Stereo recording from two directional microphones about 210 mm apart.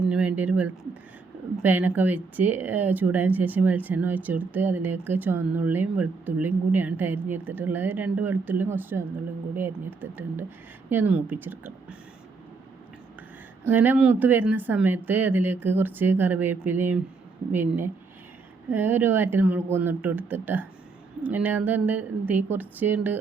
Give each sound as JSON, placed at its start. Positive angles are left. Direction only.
{"t": 0.0, "sound": "speech", "side_deg": -5}
{"t": 13.7, "sound": "speech", "side_deg": -10}